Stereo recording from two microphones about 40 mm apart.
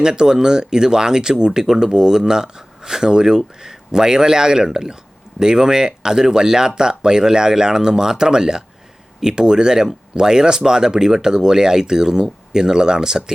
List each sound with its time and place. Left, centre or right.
0.0 s speech: centre